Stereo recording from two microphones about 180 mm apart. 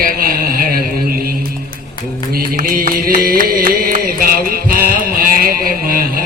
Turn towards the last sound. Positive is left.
turn(degrees=-55)  # may be behind; listen again after turning